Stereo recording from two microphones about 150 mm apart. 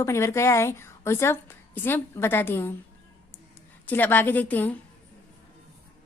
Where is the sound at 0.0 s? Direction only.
20° left (ahead or behind).